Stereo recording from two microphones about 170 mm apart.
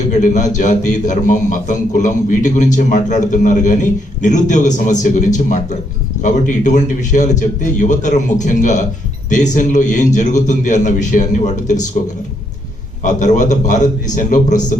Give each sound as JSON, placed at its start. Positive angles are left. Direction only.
{"t": 0.1, "sound": "a man's voice", "side_deg": 45}
{"t": 13.0, "sound": "a man's voice", "side_deg": 50}